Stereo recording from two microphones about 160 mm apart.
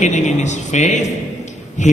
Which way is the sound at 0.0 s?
45° left (ahead or behind).